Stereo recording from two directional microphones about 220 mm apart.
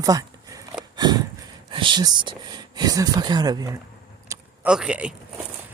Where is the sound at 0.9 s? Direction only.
20° right (ahead or behind).